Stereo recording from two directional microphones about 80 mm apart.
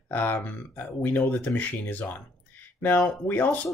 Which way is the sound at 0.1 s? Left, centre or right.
Left.